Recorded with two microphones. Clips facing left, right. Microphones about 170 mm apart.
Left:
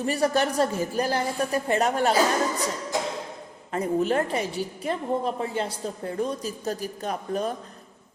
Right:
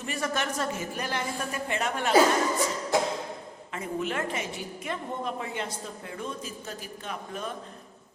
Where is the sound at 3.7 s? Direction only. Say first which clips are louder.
Left 8 dB; 40° left (ahead or behind).